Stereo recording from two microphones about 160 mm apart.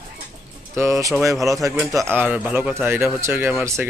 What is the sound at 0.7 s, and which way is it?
Speech, 15° right (ahead or behind).